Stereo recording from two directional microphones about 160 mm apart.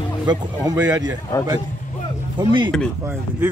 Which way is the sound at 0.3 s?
20° right (ahead or behind).